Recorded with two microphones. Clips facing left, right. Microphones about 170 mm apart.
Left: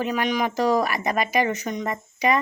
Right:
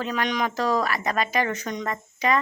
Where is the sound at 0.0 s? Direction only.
10° left (ahead or behind).